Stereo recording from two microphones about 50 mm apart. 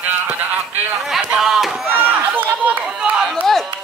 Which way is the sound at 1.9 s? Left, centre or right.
Right.